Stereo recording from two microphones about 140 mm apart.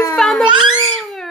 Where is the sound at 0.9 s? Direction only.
Centre (ahead or behind).